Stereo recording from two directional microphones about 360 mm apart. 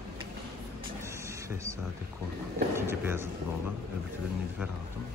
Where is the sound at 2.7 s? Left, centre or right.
Centre.